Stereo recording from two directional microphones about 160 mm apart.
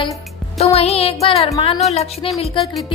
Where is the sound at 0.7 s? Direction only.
40° left (ahead or behind).